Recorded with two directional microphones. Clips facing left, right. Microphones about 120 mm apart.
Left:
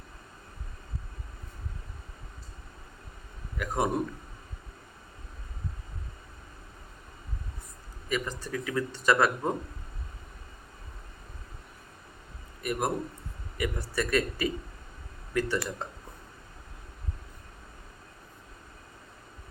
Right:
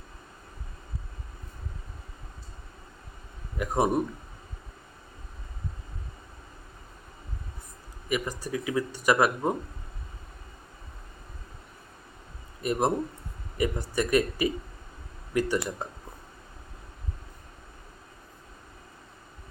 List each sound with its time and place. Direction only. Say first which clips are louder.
3.6 s a man's voice: right 3 dB; 20° right (ahead or behind)
8.1 s speech: right 2 dB; 10° right (ahead or behind)
12.6 s a man's voice: right 4 dB; 25° right (ahead or behind)